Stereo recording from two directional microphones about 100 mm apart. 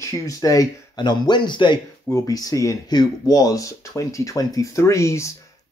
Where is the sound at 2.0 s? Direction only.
35° left (ahead or behind).